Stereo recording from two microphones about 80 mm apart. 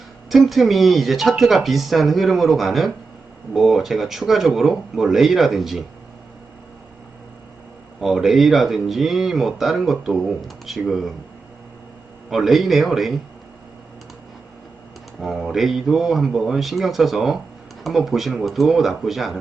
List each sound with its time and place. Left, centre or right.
0.3 s speech: centre
8.0 s speech: centre
12.3 s speech: centre
15.2 s speech: centre